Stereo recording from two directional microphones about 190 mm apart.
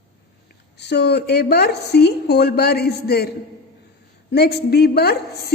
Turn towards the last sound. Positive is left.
turn(degrees=55)  # may be behind; listen again after turning